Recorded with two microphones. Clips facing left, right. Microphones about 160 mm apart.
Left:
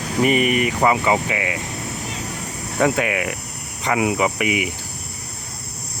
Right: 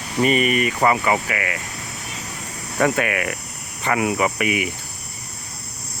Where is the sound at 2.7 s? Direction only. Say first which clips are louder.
Left 1 dB; 15° left (ahead or behind).